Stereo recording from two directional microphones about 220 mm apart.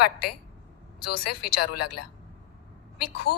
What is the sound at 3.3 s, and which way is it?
Speech, 45° left (ahead or behind).